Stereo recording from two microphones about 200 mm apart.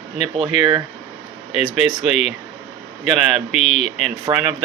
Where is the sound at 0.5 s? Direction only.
35° left (ahead or behind).